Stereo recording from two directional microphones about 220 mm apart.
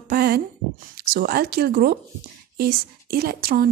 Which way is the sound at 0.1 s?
45° right (ahead or behind).